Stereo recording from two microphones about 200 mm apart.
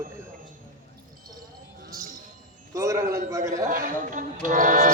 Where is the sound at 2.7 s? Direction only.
15° right (ahead or behind).